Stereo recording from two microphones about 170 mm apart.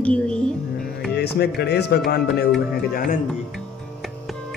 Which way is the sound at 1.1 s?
70° left (ahead or behind).